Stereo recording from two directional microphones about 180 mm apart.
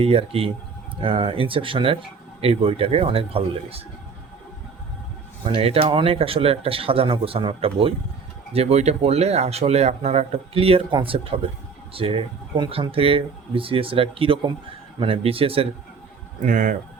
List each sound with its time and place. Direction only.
0.0 s speech: 35° right (ahead or behind)
5.5 s speech: 30° right (ahead or behind)
16.5 s speech: 45° right (ahead or behind)